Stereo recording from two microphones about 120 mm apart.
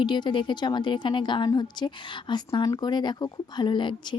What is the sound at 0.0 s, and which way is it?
Speech, 40° left (ahead or behind).